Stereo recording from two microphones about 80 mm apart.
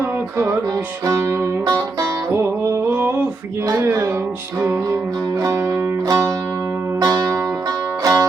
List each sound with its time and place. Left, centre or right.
0.3 s music: right
1.6 s music: right
2.3 s music: right
6.1 s music: right
8.0 s music: right